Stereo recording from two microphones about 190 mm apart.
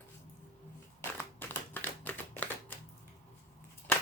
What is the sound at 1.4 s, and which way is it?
Typing, 10° left (ahead or behind).